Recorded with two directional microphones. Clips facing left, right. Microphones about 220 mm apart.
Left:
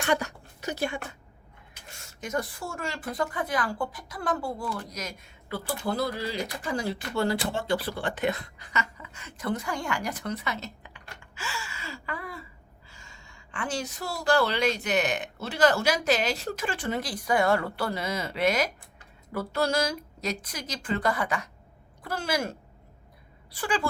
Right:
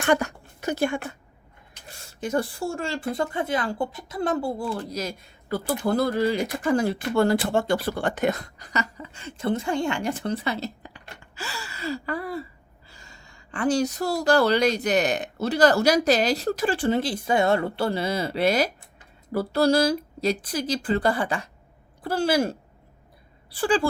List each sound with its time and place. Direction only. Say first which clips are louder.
0.0 s a woman's voice: right 5 dB; 50° right (ahead or behind)
1.9 s a woman's voice: right 6 dB; 30° right (ahead or behind)